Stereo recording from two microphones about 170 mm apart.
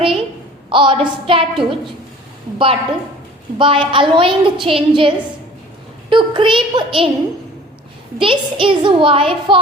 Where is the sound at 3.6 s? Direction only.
30° right (ahead or behind).